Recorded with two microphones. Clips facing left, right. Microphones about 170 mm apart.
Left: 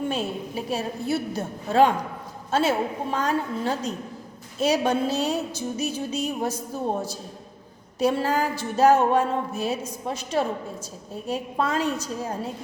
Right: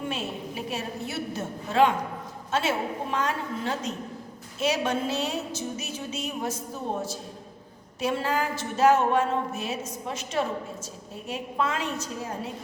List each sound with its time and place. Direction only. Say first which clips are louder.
0.1 s a woman's voice: left 4 dB; 35° left (ahead or behind)
7.9 s a woman's voice: left 4 dB; 40° left (ahead or behind)